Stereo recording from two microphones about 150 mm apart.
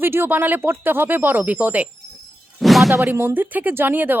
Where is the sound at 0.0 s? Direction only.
15° right (ahead or behind).